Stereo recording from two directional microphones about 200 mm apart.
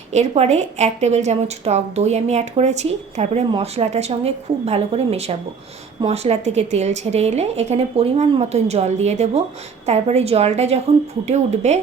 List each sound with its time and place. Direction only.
0.1 s a woman's voice: 35° right (ahead or behind)